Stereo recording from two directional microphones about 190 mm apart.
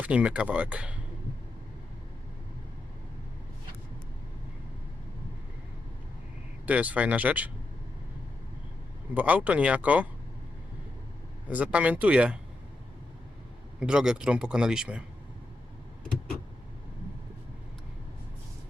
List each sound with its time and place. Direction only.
0.0 s speech: 5° right (ahead or behind)
6.7 s speech: 10° right (ahead or behind)
9.1 s speech: 10° right (ahead or behind)
11.4 s speech: 5° right (ahead or behind)
13.7 s a man's voice: 5° right (ahead or behind)